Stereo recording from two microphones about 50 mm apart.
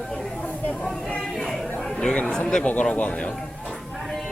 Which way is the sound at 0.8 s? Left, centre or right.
Left.